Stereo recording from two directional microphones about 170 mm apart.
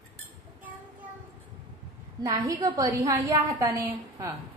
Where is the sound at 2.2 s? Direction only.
20° right (ahead or behind).